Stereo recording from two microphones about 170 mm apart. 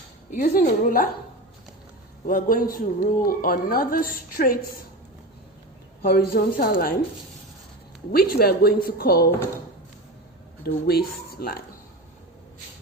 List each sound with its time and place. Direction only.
0.3 s a woman's voice: 55° left (ahead or behind)
2.2 s speech: 55° left (ahead or behind)
6.0 s speech: 60° left (ahead or behind)
8.1 s speech: 65° left (ahead or behind)
10.6 s speech: 70° left (ahead or behind)